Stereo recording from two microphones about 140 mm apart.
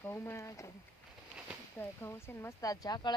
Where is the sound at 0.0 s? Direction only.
20° left (ahead or behind).